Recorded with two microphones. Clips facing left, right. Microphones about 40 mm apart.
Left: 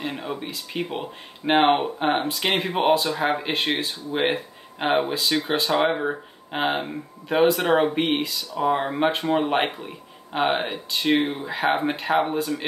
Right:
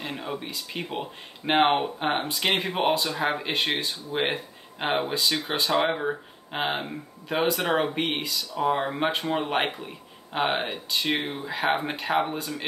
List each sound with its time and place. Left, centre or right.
0.0 s speech: centre